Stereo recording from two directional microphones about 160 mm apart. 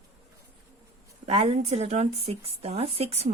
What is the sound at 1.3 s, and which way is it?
Speech, 40° right (ahead or behind).